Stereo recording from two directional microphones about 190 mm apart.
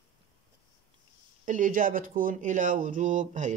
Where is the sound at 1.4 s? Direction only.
40° right (ahead or behind).